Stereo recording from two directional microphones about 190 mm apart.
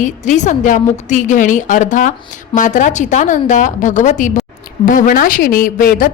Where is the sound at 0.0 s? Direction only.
40° left (ahead or behind).